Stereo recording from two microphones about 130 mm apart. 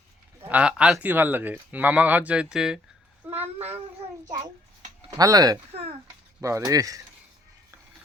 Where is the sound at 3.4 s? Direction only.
50° right (ahead or behind).